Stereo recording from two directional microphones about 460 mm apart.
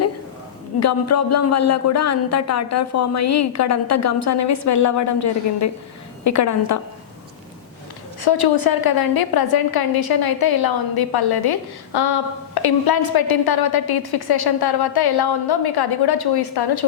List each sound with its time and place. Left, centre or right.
0.8 s speech: left
8.2 s a woman's voice: left